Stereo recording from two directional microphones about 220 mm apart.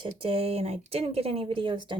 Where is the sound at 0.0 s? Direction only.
25° right (ahead or behind).